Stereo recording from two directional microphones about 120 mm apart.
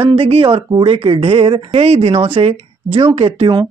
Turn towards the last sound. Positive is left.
turn(degrees=-55)  # may be behind; listen again after turning